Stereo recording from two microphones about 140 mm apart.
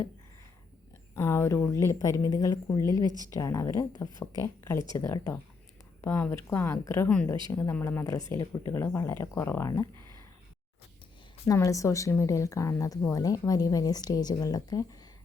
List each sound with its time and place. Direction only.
1.1 s speech: 20° left (ahead or behind)
11.4 s speech: 25° left (ahead or behind)